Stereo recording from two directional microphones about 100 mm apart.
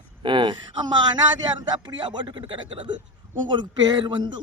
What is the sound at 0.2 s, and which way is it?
A man's voice, 55° right (ahead or behind).